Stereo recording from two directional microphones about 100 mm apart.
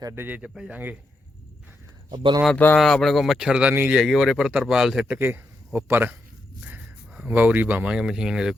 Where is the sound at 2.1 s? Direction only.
55° right (ahead or behind).